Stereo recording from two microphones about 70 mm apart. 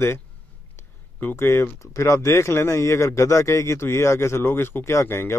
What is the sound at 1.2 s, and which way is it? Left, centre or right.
Speech, left.